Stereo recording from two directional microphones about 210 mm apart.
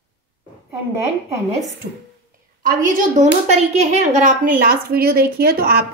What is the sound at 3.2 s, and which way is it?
A woman's voice, 30° right (ahead or behind).